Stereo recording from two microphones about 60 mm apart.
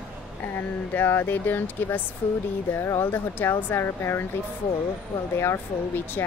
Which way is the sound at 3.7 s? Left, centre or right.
Left.